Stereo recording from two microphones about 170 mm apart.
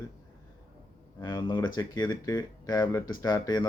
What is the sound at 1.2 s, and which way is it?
Speech, 25° left (ahead or behind).